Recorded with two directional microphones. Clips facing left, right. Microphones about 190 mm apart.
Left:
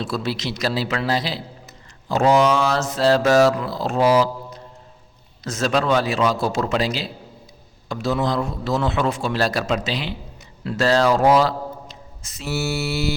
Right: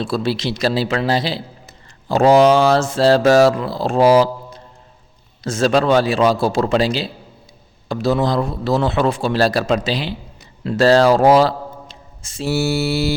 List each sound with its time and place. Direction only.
0.0 s a man's voice: 30° right (ahead or behind)
5.4 s a man's voice: 30° right (ahead or behind)